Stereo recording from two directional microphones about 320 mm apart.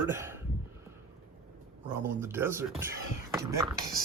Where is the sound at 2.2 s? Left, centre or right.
Centre.